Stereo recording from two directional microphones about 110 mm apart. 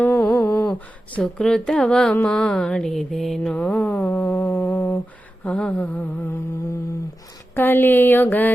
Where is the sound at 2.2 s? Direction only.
5° left (ahead or behind).